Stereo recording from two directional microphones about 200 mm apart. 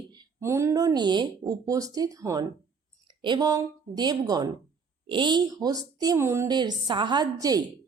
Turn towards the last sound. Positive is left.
turn(degrees=-20)  # may be behind; listen again after turning